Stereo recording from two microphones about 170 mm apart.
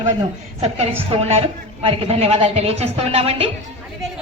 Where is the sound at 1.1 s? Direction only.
35° right (ahead or behind).